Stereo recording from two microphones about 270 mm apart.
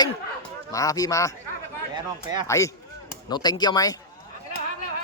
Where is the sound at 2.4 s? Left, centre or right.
Centre.